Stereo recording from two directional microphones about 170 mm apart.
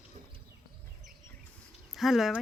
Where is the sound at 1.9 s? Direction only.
Centre (ahead or behind).